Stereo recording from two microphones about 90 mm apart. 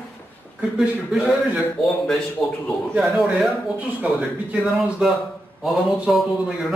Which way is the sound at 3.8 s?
15° right (ahead or behind).